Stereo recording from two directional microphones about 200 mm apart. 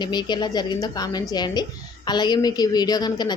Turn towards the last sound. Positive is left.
turn(degrees=20)  # may be behind; listen again after turning